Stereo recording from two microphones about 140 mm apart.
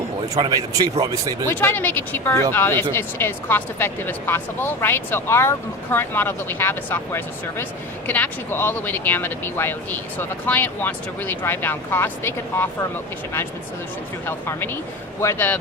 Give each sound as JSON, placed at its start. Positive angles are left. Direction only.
{"t": 0.3, "sound": "speech", "side_deg": -35}
{"t": 0.8, "sound": "speech", "side_deg": -25}
{"t": 1.5, "sound": "speech", "side_deg": 15}
{"t": 14.3, "sound": "speech", "side_deg": 15}